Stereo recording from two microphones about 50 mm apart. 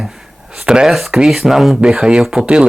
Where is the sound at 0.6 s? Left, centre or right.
Centre.